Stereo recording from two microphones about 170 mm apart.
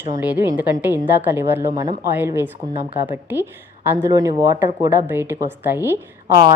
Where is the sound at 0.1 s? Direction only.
10° right (ahead or behind).